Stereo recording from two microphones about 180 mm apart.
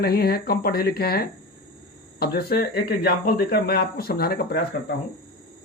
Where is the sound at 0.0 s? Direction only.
60° left (ahead or behind).